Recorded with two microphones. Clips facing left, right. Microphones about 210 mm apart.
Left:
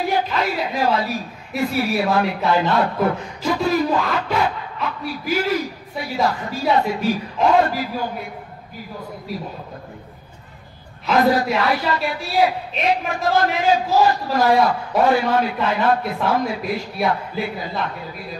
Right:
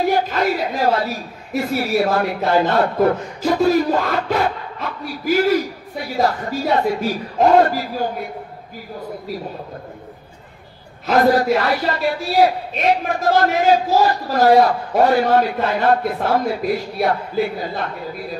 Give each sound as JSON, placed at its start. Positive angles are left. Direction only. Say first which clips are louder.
{"t": 0.0, "sound": "a sound", "louder": "right 3 dB", "side_deg": -45}
{"t": 1.5, "sound": "a man's voice", "louder": "right 2 dB", "side_deg": -45}
{"t": 11.1, "sound": "a man's voice", "louder": "right 3 dB", "side_deg": -45}